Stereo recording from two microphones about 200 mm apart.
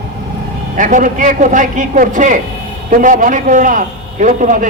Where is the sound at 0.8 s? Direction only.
40° right (ahead or behind).